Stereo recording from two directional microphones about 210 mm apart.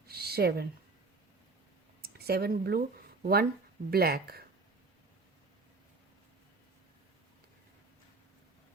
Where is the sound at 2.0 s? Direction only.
50° right (ahead or behind).